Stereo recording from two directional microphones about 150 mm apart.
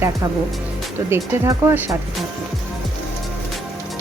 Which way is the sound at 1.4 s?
20° right (ahead or behind).